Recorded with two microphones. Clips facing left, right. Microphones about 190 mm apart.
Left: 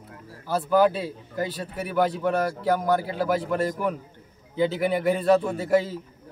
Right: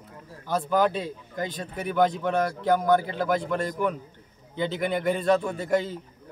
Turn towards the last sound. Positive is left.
turn(degrees=5)  # may be behind; listen again after turning